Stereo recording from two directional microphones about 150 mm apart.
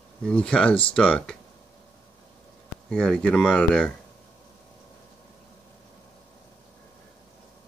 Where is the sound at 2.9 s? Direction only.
5° left (ahead or behind).